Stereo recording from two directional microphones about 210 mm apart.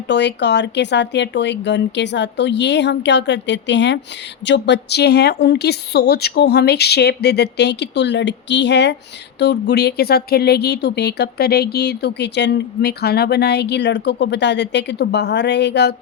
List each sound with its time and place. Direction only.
0.1 s speech: 55° left (ahead or behind)